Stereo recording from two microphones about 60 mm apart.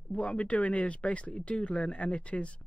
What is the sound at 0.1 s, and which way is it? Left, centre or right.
Speech, left.